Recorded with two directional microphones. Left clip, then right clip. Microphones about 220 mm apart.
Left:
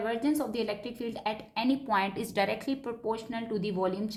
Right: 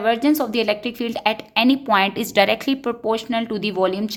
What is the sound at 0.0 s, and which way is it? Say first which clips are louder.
A woman's voice: right 12 dB; 45° right (ahead or behind).